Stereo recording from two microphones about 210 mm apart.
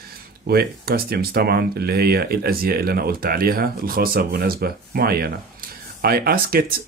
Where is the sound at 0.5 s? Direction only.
45° right (ahead or behind).